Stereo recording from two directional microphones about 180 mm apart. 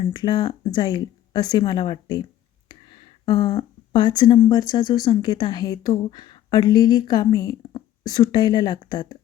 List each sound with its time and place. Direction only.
0.0 s speech: 25° left (ahead or behind)